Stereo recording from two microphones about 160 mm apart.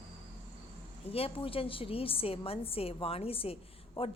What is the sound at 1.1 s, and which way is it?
A woman's voice, 35° left (ahead or behind).